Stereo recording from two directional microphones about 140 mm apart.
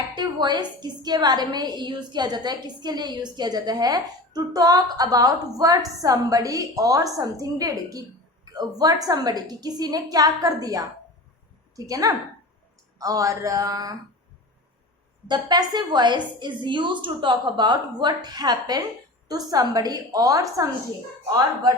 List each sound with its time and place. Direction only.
0.2 s a woman's voice: 30° right (ahead or behind)
11.9 s a woman's voice: 25° right (ahead or behind)
15.3 s a woman's voice: 30° right (ahead or behind)